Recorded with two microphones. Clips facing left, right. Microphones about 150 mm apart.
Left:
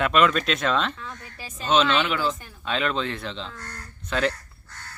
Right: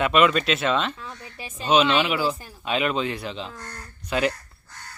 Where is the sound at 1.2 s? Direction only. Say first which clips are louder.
Right 2 dB; 25° right (ahead or behind).